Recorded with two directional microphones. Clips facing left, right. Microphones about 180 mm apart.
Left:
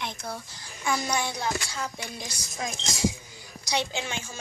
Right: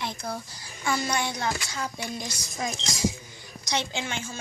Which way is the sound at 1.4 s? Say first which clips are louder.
Even; 5° right (ahead or behind).